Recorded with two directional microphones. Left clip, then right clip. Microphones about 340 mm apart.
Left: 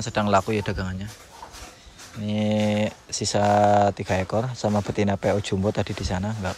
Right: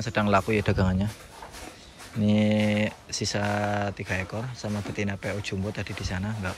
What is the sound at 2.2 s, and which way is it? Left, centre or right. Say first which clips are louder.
Speech: even; centre.